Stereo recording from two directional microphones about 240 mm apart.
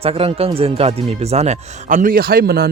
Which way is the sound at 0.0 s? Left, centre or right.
Right.